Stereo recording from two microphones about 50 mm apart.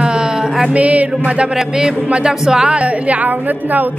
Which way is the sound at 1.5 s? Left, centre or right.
Centre.